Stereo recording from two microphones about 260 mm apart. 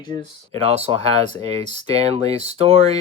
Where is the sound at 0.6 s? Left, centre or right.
Right.